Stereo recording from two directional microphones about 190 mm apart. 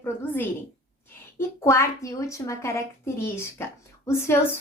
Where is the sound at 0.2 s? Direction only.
10° left (ahead or behind).